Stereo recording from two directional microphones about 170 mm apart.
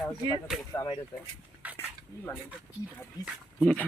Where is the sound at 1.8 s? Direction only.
10° left (ahead or behind).